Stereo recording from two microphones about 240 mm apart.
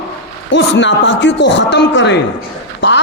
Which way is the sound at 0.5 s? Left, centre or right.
Left.